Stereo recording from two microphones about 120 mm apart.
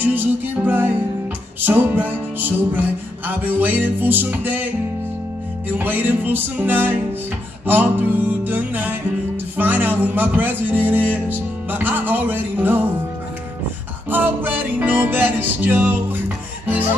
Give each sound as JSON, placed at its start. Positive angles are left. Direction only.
{"t": 0.0, "sound": "music", "side_deg": -15}
{"t": 14.1, "sound": "music", "side_deg": -15}